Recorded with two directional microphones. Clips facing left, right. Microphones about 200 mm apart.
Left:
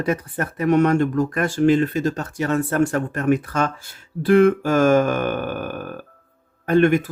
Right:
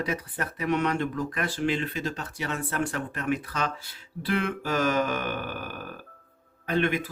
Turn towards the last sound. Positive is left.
turn(degrees=50)  # may be behind; listen again after turning